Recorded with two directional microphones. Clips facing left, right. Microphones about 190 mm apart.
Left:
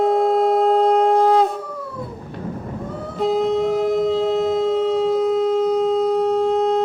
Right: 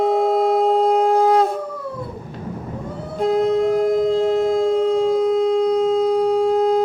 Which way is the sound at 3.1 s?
Centre (ahead or behind).